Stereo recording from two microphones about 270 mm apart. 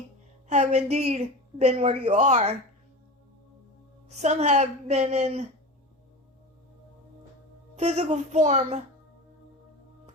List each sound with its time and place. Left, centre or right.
0.4 s a woman's voice: right
4.1 s a woman's voice: right
7.8 s a woman's voice: right